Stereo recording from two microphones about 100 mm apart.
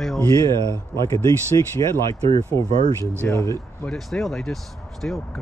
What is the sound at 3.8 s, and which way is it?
Speech, 5° left (ahead or behind).